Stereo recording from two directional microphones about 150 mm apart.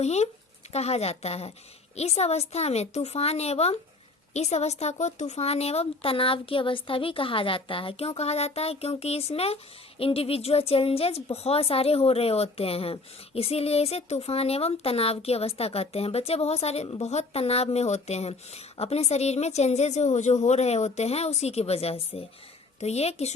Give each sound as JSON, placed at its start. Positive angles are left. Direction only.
{"t": 0.0, "sound": "a woman's voice", "side_deg": 45}